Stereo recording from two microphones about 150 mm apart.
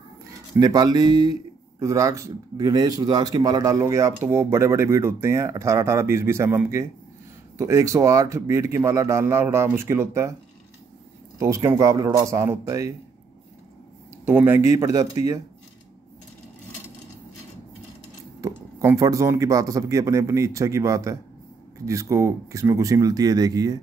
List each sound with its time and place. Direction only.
0.6 s speech: 25° right (ahead or behind)
11.3 s speech: 20° right (ahead or behind)
14.2 s speech: 15° right (ahead or behind)
18.4 s speech: 20° right (ahead or behind)